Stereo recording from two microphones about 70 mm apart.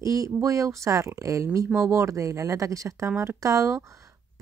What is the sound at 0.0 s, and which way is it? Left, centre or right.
Speech, right.